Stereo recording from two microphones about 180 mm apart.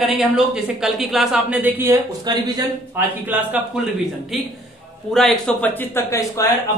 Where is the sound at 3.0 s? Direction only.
10° right (ahead or behind).